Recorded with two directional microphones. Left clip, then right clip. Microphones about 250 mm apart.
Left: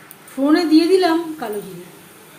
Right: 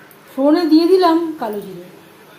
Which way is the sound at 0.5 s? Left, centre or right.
Centre.